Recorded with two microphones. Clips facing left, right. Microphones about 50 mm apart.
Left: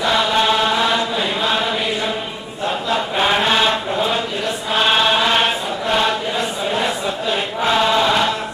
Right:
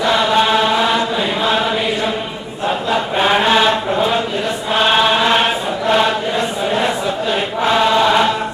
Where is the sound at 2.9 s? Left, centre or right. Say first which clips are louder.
Right 2 dB; centre.